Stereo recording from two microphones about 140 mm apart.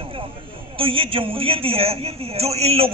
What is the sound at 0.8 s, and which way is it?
A man's voice, 40° right (ahead or behind).